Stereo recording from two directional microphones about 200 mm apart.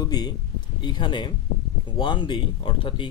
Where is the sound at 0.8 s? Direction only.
20° left (ahead or behind).